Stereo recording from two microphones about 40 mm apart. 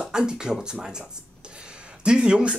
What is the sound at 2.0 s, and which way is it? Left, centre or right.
Speech, right.